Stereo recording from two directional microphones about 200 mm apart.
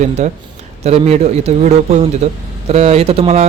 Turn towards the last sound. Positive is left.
turn(degrees=-30)  # may be behind; listen again after turning